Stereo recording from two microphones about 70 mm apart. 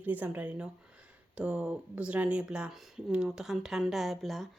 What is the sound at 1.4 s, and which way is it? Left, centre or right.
Speech, centre.